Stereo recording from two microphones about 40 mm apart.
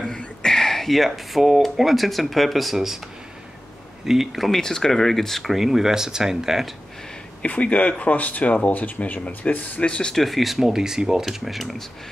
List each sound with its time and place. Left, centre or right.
0.4 s a sound: centre
1.8 s speech: centre
4.0 s speech: centre
4.5 s speech: centre
7.4 s speech: left
9.8 s speech: left
10.1 s speech: centre
11.3 s speech: centre